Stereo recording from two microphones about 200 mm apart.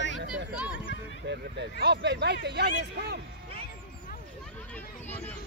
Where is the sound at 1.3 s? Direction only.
55° right (ahead or behind).